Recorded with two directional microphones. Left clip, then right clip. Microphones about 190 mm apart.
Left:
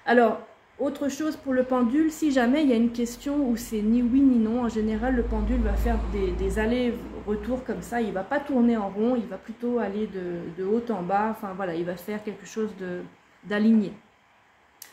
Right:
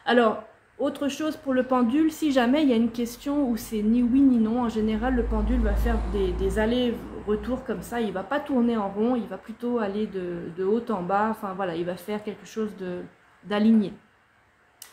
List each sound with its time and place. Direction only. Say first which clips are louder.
0.0 s a woman's voice: left 1 dB; 5° right (ahead or behind)